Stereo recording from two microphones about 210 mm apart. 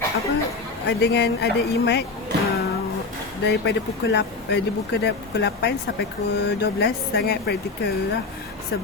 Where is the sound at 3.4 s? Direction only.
55° left (ahead or behind).